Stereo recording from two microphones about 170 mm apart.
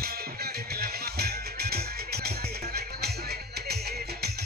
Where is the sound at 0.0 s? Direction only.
65° right (ahead or behind).